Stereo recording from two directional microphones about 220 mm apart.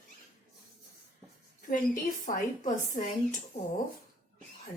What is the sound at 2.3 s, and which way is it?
Speech, 35° left (ahead or behind).